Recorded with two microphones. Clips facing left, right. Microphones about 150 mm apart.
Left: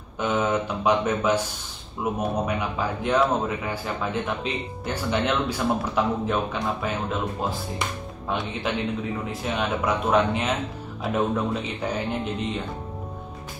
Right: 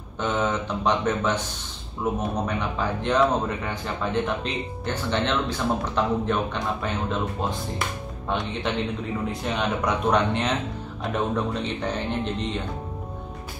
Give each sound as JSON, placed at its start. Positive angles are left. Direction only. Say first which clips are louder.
{"t": 0.2, "sound": "a man's voice", "louder": "left 1 dB", "side_deg": 10}
{"t": 8.7, "sound": "a man's voice", "louder": "left 1 dB", "side_deg": 5}